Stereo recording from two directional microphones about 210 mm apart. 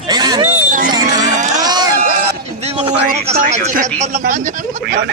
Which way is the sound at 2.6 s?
30° right (ahead or behind).